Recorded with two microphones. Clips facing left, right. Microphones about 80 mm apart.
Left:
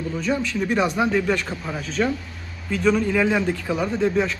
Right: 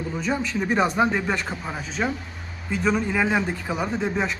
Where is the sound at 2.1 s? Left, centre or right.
Right.